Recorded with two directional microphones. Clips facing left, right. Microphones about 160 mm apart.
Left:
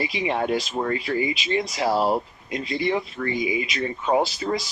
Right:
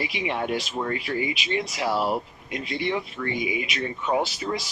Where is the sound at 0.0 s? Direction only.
40° left (ahead or behind).